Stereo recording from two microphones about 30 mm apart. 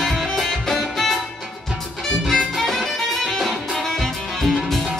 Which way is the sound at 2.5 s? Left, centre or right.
Centre.